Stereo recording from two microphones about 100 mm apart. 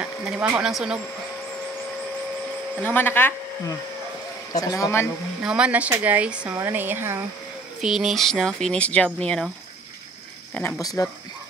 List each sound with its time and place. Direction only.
0.0 s speech: 10° right (ahead or behind)
2.8 s speech: 20° left (ahead or behind)
4.6 s speech: 35° left (ahead or behind)
5.4 s speech: 10° right (ahead or behind)
6.5 s speech: 20° right (ahead or behind)
7.8 s speech: 5° right (ahead or behind)
10.8 s speech: 35° left (ahead or behind)